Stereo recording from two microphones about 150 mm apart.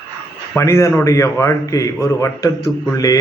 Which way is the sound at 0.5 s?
20° left (ahead or behind).